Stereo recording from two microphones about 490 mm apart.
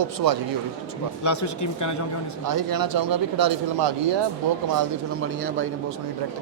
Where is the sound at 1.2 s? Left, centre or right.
Left.